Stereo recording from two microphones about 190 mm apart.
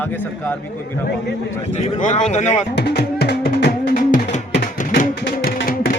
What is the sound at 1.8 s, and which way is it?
Speech, 40° left (ahead or behind).